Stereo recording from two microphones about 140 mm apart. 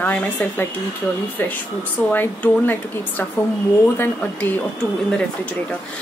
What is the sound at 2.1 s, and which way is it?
A woman's voice, 15° left (ahead or behind).